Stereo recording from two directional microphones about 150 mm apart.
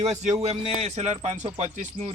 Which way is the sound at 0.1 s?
50° right (ahead or behind).